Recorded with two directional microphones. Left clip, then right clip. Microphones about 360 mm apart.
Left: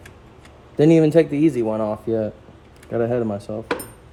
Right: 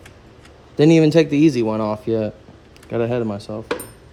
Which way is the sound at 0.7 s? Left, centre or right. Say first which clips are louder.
Right 1 dB; centre.